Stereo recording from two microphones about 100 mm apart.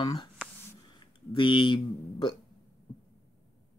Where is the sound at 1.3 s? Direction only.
55° left (ahead or behind).